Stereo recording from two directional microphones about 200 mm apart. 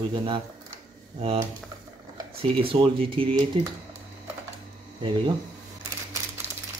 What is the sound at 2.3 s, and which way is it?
Speech, 30° right (ahead or behind).